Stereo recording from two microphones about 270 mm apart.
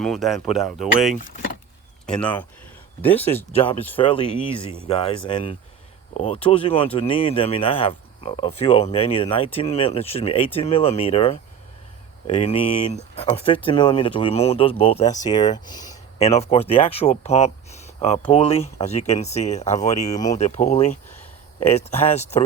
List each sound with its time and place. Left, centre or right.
0.0 s speech: centre
2.0 s speech: centre
3.9 s speech: centre